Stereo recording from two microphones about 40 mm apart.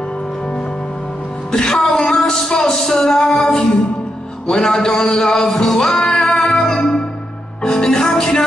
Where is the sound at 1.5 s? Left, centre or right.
Centre.